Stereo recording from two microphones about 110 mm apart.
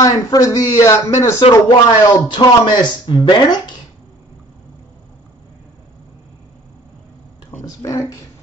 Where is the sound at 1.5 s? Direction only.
35° left (ahead or behind).